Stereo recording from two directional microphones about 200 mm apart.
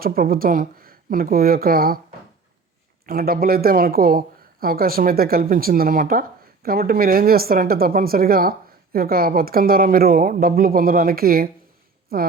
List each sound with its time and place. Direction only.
0.0 s speech: 45° right (ahead or behind)
3.1 s a woman's voice: 45° right (ahead or behind)